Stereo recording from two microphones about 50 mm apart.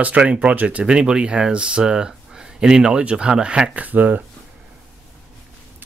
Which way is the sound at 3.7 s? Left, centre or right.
Right.